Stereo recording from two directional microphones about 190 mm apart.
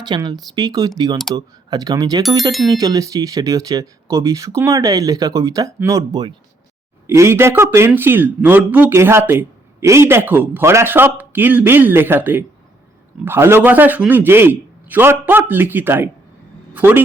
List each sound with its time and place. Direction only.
0.0 s speech: 25° right (ahead or behind)
2.5 s speech: centre (ahead or behind)
2.7 s a man's voice: 20° right (ahead or behind)